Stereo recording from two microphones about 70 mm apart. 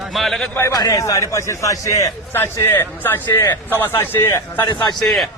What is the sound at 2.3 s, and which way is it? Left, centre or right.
A man's voice, left.